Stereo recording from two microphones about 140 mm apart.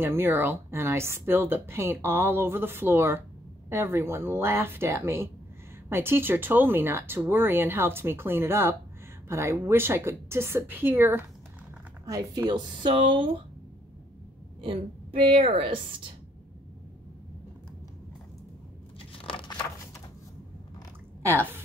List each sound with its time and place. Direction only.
0.0 s speech: 15° right (ahead or behind)
12.8 s a woman's voice: 40° right (ahead or behind)
14.6 s a woman's voice: 40° right (ahead or behind)
19.1 s a sound: 40° left (ahead or behind)
21.3 s speech: 15° right (ahead or behind)